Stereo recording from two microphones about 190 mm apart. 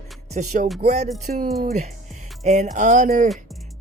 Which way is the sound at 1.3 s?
50° right (ahead or behind).